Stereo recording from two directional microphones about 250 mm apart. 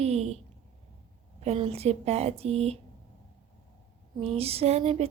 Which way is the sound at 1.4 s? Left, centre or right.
Right.